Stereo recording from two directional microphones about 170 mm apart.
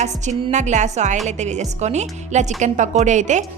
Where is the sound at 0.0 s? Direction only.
45° right (ahead or behind).